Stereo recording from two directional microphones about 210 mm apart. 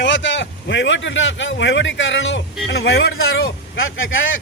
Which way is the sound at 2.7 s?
50° left (ahead or behind).